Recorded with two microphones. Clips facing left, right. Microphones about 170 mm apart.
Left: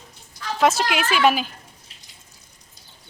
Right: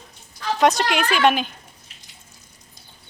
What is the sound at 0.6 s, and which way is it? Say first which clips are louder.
Speech: right 1 dB; 5° left (ahead or behind).